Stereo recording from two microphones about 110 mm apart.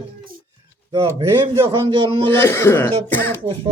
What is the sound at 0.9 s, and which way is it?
A man's voice, 45° right (ahead or behind).